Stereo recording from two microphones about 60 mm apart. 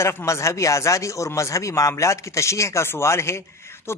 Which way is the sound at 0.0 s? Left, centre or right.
Left.